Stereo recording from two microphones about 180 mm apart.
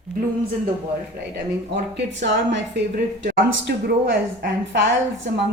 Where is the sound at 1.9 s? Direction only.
80° right.